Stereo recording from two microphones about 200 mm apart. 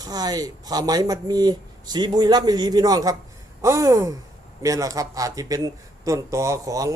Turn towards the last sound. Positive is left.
turn(degrees=-15)  # may be behind; listen again after turning